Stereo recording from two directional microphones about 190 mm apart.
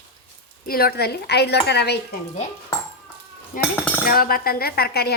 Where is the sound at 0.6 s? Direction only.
55° left (ahead or behind).